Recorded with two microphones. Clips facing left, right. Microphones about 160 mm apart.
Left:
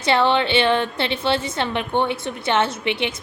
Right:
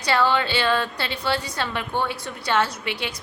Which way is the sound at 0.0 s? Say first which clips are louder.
Left 3 dB; 25° left (ahead or behind).